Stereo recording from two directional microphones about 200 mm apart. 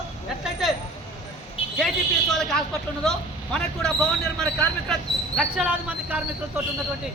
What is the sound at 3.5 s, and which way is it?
A man's voice, 5° left (ahead or behind).